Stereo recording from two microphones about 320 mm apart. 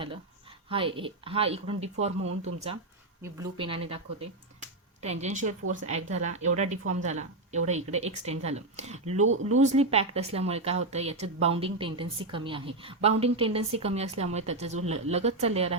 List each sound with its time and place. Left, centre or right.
0.7 s a woman's voice: centre
5.0 s a woman's voice: right
9.2 s speech: right
9.6 s a woman's voice: right